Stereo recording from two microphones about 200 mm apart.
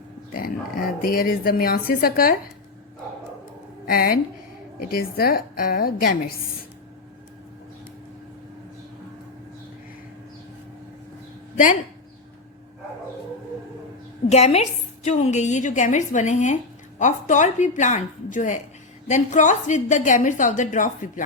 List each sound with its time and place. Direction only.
0.3 s speech: 45° left (ahead or behind)
3.8 s speech: 50° left (ahead or behind)
11.5 s speech: 40° left (ahead or behind)
14.3 s a woman's voice: 30° left (ahead or behind)